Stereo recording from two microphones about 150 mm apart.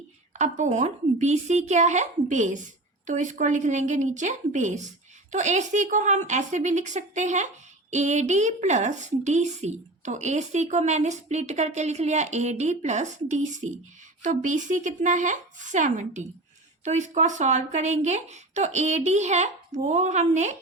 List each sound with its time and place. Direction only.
0.3 s a woman's voice: 55° right (ahead or behind)